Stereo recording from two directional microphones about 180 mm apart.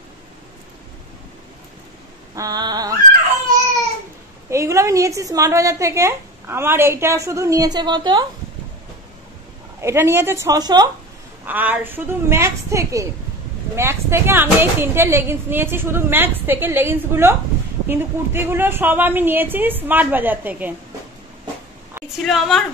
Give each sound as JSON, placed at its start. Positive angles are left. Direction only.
{"t": 2.3, "sound": "a sound", "side_deg": -20}
{"t": 4.5, "sound": "a woman's voice", "side_deg": -15}
{"t": 9.8, "sound": "a woman's voice", "side_deg": -15}
{"t": 11.4, "sound": "a woman's voice", "side_deg": -10}
{"t": 22.2, "sound": "a woman's voice", "side_deg": 0}